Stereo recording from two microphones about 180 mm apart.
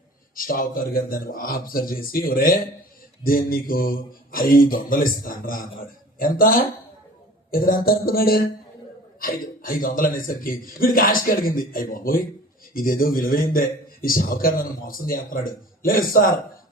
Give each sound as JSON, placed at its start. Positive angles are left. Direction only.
{"t": 0.3, "sound": "a man's voice", "side_deg": 50}
{"t": 7.5, "sound": "a sound", "side_deg": 55}
{"t": 9.2, "sound": "a man's voice", "side_deg": 50}